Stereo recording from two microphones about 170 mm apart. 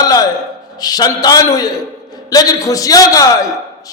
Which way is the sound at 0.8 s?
25° left (ahead or behind).